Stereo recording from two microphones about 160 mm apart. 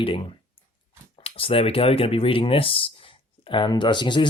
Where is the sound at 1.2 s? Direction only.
35° left (ahead or behind).